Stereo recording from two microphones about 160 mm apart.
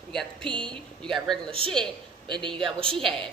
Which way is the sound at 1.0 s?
5° left (ahead or behind).